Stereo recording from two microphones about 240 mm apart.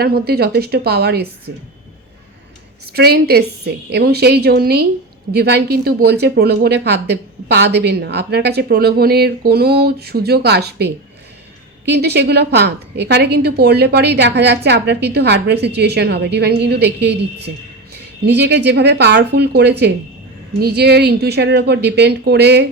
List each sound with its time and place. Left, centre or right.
0.0 s a woman's voice: right
2.8 s a woman's voice: right
11.9 s a woman's voice: right